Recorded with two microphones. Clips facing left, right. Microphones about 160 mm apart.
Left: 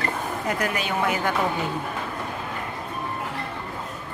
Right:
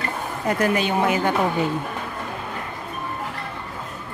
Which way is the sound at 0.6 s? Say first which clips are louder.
Right 8 dB; 25° right (ahead or behind).